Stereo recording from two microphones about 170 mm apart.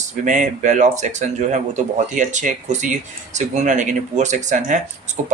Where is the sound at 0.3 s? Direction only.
45° right (ahead or behind).